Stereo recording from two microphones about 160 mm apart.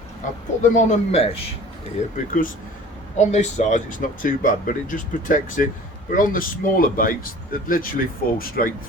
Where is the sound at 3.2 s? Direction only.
50° left (ahead or behind).